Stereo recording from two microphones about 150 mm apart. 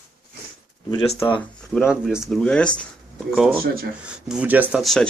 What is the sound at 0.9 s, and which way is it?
Speech, 35° left (ahead or behind).